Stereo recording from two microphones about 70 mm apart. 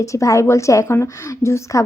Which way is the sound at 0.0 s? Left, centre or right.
Left.